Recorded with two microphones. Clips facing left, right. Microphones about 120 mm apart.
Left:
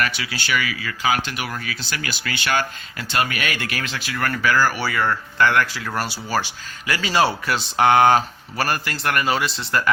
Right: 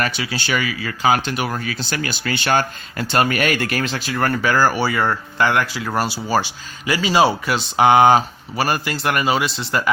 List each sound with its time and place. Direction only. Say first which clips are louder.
0.2 s speech: right 2 dB; 30° right (ahead or behind); by 9.9 s 10° right (ahead or behind)